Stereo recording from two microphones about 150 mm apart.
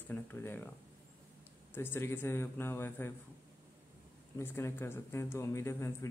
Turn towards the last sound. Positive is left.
turn(degrees=20)  # may be behind; listen again after turning